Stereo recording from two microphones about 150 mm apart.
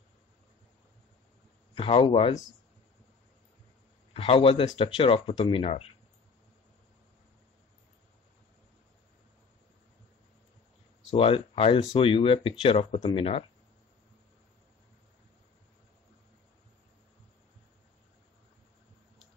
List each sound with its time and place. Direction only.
1.8 s speech: 35° left (ahead or behind)
4.1 s speech: 40° left (ahead or behind)
11.1 s speech: 40° left (ahead or behind)